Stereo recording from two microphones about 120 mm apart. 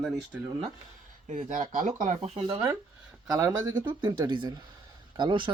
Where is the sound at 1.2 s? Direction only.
90° right.